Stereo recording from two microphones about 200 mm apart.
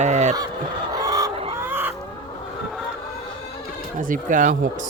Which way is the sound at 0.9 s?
20° right (ahead or behind).